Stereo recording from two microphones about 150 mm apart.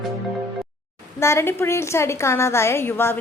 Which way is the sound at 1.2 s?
20° left (ahead or behind).